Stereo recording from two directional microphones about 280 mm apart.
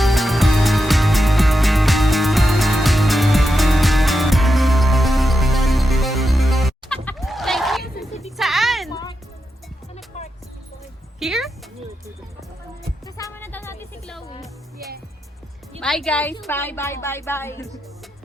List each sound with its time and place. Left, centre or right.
0.0 s music: centre
8.4 s a sound: centre
8.9 s music: centre
10.1 s music: left
11.2 s a sound: centre
13.2 s music: centre
15.8 s a woman's voice: centre